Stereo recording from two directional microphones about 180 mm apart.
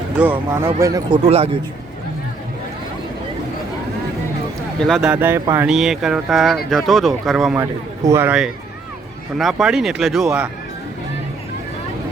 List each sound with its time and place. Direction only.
0.2 s speech: 10° right (ahead or behind)
4.8 s speech: centre (ahead or behind)
5.7 s speech: centre (ahead or behind)
7.5 s speech: 15° right (ahead or behind)